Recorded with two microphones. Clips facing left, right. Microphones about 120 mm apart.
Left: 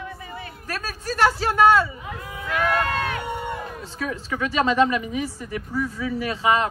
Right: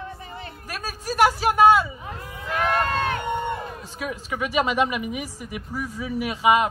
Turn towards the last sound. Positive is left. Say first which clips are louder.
# right 2 dB
turn(degrees=-15)  # may be behind; listen again after turning